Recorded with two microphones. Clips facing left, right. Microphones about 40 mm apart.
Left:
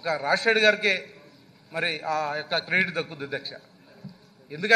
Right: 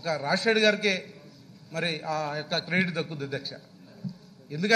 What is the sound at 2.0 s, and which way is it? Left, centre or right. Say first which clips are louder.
A man's voice: left 3 dB; centre.